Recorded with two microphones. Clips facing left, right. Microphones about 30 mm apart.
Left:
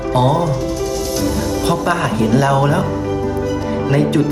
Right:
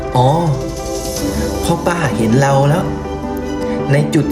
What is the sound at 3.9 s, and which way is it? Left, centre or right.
Speech, right.